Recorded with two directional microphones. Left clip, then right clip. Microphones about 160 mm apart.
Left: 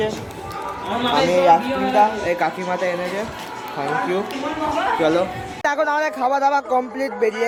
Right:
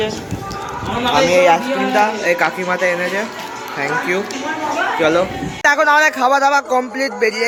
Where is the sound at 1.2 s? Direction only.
5° left (ahead or behind).